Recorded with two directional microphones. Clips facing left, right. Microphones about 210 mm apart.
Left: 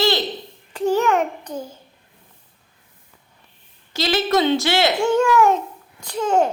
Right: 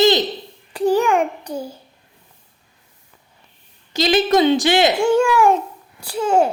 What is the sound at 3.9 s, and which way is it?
A woman's voice, 15° right (ahead or behind).